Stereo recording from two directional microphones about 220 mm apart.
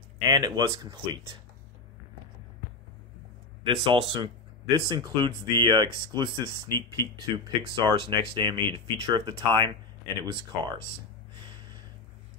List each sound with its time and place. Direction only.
0.2 s speech: 15° right (ahead or behind)
3.6 s speech: 25° right (ahead or behind)